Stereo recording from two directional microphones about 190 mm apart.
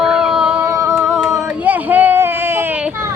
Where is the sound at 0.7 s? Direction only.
15° right (ahead or behind).